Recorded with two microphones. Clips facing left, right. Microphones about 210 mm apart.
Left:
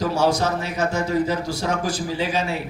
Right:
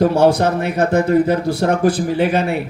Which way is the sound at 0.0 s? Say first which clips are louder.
Right 7 dB; 55° right (ahead or behind).